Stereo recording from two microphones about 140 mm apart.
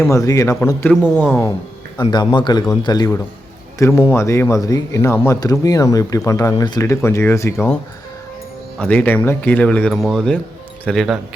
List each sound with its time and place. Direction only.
0.0 s speech: 20° left (ahead or behind)
2.0 s speech: 30° left (ahead or behind)
8.8 s speech: 10° left (ahead or behind)